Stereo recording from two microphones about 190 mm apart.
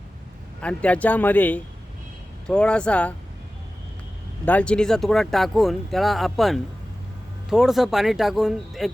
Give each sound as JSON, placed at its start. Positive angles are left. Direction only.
{"t": 0.6, "sound": "speech", "side_deg": 5}
{"t": 4.4, "sound": "speech", "side_deg": 5}